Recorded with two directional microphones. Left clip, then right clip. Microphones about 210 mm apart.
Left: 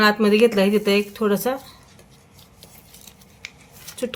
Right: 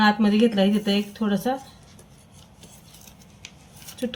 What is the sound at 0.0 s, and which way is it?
Speech, 25° left (ahead or behind).